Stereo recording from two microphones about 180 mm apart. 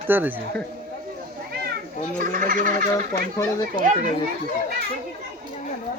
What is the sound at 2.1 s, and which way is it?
Speech, 50° right (ahead or behind).